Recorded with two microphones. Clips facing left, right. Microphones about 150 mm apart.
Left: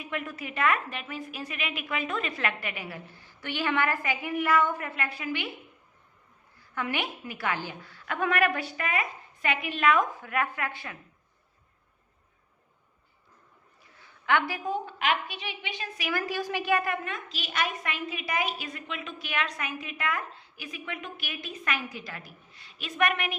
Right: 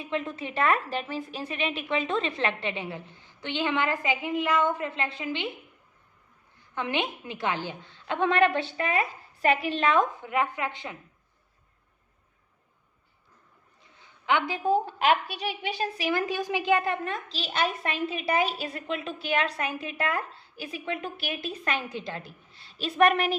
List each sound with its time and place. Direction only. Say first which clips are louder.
0.0 s a woman's voice: right 4 dB; 25° right (ahead or behind)
6.7 s a woman's voice: right 2 dB; 20° right (ahead or behind)
14.0 s a sound: even; 15° right (ahead or behind)
14.6 s a woman's voice: right 6 dB; 35° right (ahead or behind)
16.2 s a woman's voice: right 3 dB; 15° right (ahead or behind); by 23.3 s 30° right (ahead or behind)